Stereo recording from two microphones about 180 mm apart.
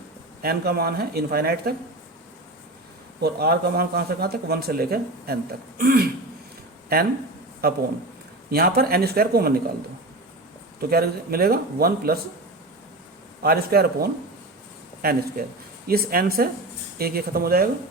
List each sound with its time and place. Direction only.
0.4 s speech: 60° right (ahead or behind)
3.2 s speech: 60° right (ahead or behind)
7.6 s speech: 60° right (ahead or behind)
10.8 s speech: 60° right (ahead or behind)
13.4 s speech: 55° right (ahead or behind)
15.4 s speech: 55° right (ahead or behind)